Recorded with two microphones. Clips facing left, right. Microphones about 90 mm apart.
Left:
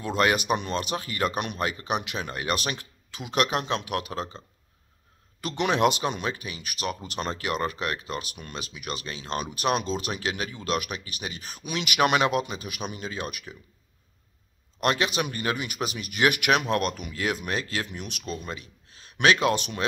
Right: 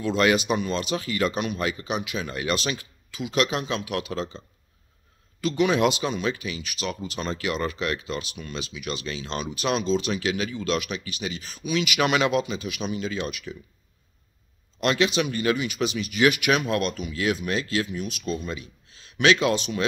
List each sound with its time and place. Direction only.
0.0 s speech: 45° left (ahead or behind)
5.4 s speech: 60° left (ahead or behind)
14.8 s speech: 45° left (ahead or behind)
17.8 s speech: 65° left (ahead or behind)
18.4 s speech: 50° left (ahead or behind)